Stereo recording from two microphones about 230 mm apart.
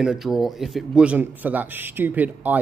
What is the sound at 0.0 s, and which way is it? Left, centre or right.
A man's voice, centre.